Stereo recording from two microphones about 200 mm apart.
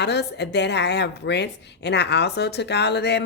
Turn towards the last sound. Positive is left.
turn(degrees=55)  # may be behind; listen again after turning